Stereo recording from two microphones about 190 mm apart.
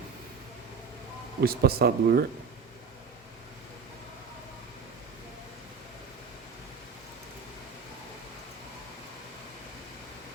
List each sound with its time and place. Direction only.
1.4 s speech: 55° right (ahead or behind)